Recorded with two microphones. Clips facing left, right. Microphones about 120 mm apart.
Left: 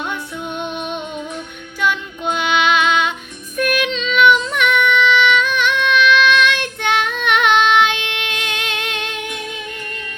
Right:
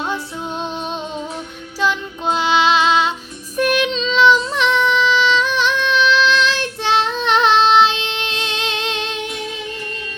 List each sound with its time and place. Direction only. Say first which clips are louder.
0.0 s music: right 2 dB; 30° right (ahead or behind)
1.8 s child singing: even; 30° right (ahead or behind)